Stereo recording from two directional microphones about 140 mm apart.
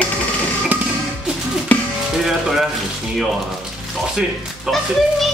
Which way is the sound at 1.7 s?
10° left (ahead or behind).